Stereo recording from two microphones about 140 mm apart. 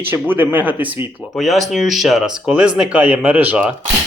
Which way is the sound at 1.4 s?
Centre (ahead or behind).